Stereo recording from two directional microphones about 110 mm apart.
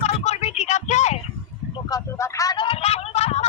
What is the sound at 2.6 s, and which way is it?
Speech, 60° left (ahead or behind).